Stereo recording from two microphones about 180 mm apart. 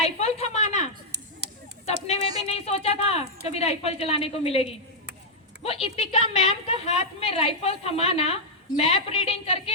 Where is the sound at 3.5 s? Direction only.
35° left (ahead or behind).